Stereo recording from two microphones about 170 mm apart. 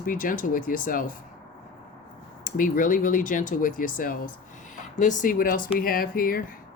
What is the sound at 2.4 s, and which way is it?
Speech, 55° left (ahead or behind).